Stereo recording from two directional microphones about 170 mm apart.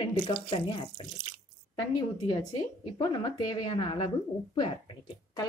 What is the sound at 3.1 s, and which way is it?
Speech, 25° left (ahead or behind).